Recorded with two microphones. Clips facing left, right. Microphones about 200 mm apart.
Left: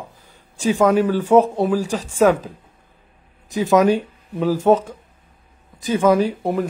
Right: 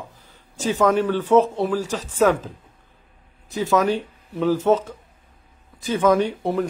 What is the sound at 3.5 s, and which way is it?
Speech, 15° left (ahead or behind).